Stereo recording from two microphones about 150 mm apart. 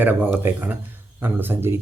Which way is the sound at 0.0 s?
10° right (ahead or behind).